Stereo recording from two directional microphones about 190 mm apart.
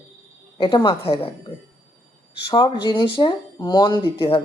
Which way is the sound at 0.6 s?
25° left (ahead or behind).